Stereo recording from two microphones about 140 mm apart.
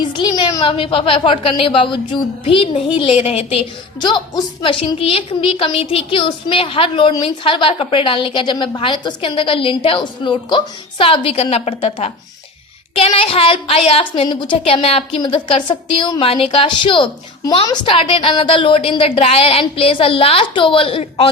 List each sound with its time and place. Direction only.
0.0 s a woman's voice: 35° left (ahead or behind)